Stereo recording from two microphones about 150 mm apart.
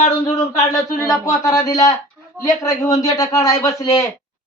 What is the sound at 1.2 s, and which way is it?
Speech, 25° left (ahead or behind).